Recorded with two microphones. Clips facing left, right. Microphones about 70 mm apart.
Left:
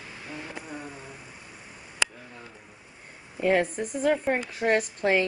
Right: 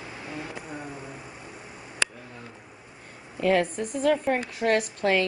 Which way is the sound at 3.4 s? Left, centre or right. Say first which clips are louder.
Right 1 dB; centre.